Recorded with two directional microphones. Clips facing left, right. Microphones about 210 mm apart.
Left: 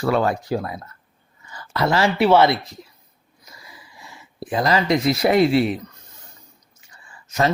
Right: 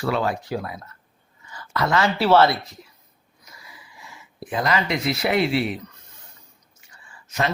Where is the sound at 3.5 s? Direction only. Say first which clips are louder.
Left 2 dB; 35° left (ahead or behind).